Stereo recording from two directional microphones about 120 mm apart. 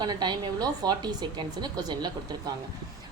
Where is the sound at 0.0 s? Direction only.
35° right (ahead or behind).